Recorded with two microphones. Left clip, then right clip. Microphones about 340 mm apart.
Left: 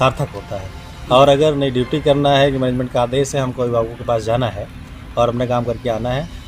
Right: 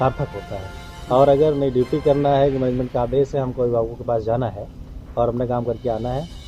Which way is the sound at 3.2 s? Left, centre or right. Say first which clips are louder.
Left 1 dB; right.